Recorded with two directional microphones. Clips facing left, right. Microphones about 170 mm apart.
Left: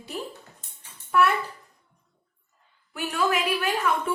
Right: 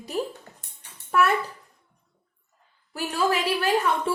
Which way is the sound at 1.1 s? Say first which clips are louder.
Even; 45° right (ahead or behind).